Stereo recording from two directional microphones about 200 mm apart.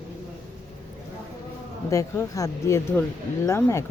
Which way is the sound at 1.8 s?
15° left (ahead or behind).